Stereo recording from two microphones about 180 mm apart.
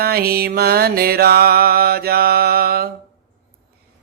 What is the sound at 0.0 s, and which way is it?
Speech, 60° right (ahead or behind).